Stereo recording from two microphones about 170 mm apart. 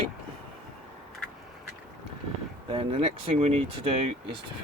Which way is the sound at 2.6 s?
35° right (ahead or behind).